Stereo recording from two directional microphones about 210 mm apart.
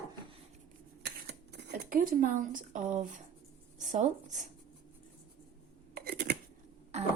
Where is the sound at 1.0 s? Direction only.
50° right (ahead or behind).